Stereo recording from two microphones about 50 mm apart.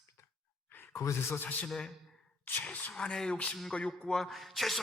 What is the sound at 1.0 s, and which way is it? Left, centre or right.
Speech, left.